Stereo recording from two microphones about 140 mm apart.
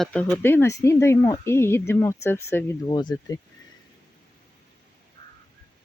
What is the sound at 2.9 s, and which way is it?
Speech, 30° left (ahead or behind).